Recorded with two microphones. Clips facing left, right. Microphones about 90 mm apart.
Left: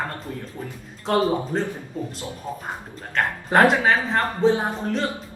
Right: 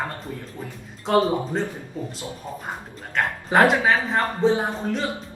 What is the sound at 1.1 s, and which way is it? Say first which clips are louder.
Speech: right 1 dB; centre (ahead or behind).